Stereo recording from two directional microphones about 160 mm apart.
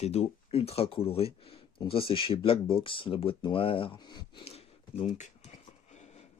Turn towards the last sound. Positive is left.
turn(degrees=45)  # may be behind; listen again after turning